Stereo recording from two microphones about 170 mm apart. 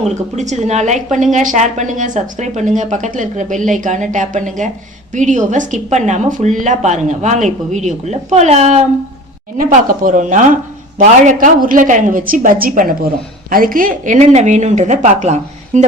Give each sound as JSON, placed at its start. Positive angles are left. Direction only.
{"t": 0.1, "sound": "speech", "side_deg": -45}
{"t": 9.6, "sound": "speech", "side_deg": -50}